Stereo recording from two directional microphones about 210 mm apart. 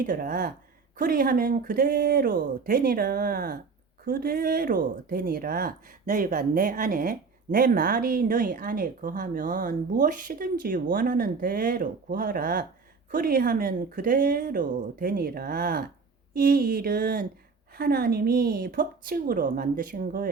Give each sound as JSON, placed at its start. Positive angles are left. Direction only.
{"t": 0.0, "sound": "speech", "side_deg": -40}